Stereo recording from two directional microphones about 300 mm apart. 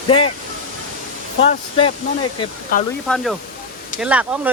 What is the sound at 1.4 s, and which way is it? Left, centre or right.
Speech, centre.